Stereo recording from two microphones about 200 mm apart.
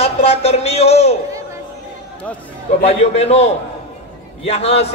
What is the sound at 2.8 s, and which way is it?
A man's voice, 30° left (ahead or behind).